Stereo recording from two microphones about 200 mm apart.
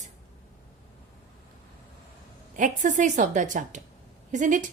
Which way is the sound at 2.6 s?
40° right (ahead or behind).